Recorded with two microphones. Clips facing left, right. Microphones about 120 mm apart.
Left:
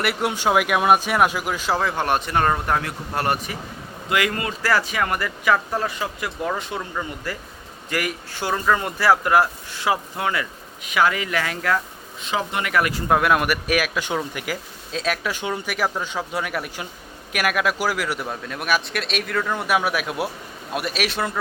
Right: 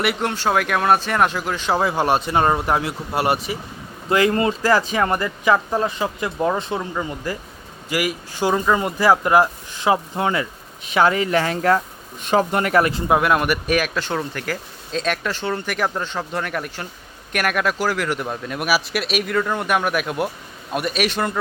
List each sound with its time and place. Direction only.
0.0 s speech: 5° left (ahead or behind)
1.8 s speech: 15° right (ahead or behind)
4.1 s speech: 30° right (ahead or behind)
7.9 s speech: 10° right (ahead or behind); by 11.8 s 35° right (ahead or behind)
12.2 s speech: 45° right (ahead or behind)
13.1 s speech: 5° right (ahead or behind)